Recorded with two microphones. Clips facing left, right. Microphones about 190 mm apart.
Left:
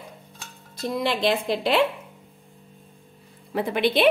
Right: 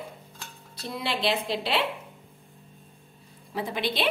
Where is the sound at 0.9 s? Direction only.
50° left (ahead or behind).